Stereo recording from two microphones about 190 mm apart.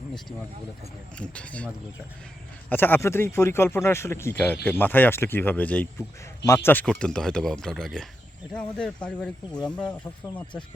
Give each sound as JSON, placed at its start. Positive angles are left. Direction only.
{"t": 1.2, "sound": "speech", "side_deg": 5}
{"t": 9.6, "sound": "speech", "side_deg": 5}